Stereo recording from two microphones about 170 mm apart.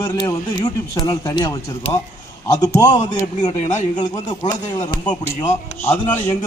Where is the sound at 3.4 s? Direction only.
45° left (ahead or behind).